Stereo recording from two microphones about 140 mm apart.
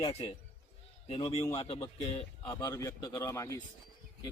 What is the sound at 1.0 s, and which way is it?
Speech, 40° left (ahead or behind).